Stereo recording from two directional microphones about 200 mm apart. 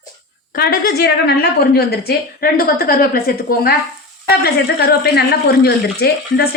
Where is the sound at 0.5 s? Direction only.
50° left (ahead or behind).